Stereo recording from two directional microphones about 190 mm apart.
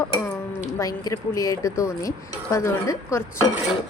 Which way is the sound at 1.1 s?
20° left (ahead or behind).